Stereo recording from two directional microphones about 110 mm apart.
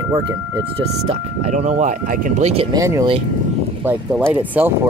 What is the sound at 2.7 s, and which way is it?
Speech, 30° right (ahead or behind).